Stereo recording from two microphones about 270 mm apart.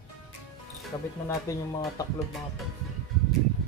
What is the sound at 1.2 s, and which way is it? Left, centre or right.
Speech, centre.